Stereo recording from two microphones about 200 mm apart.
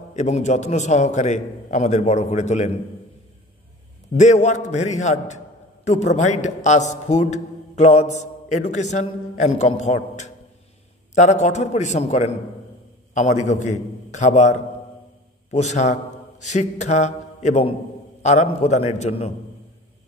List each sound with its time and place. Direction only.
0.1 s a man's voice: 35° left (ahead or behind)
4.2 s a man's voice: 35° left (ahead or behind)